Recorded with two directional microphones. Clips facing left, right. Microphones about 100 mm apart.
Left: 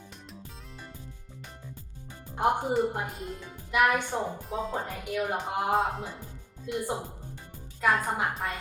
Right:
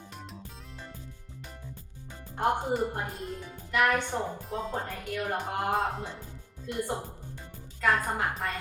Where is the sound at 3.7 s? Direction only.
10° left (ahead or behind).